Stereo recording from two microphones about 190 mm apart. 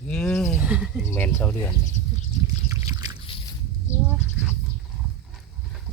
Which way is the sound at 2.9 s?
20° right (ahead or behind).